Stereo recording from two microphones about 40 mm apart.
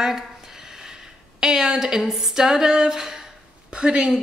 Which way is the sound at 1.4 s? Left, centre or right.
Centre.